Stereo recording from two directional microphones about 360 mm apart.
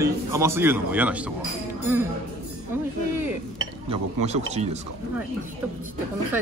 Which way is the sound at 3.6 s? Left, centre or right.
Centre.